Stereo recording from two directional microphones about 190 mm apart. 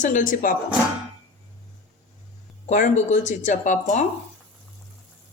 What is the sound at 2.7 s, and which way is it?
Speech, 40° left (ahead or behind).